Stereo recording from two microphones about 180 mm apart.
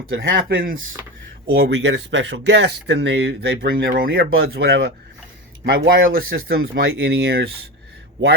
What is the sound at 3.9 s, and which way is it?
Speech, 55° right (ahead or behind).